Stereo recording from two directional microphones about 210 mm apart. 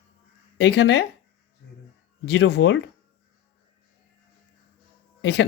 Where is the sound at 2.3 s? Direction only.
55° left (ahead or behind).